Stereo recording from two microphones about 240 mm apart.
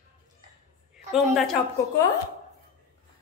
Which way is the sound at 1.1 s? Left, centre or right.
Centre.